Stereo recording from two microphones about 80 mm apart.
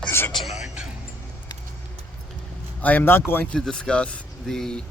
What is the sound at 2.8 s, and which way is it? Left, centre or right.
Speech, left.